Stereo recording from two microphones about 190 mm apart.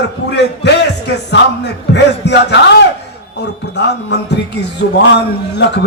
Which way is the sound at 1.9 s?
65° left (ahead or behind).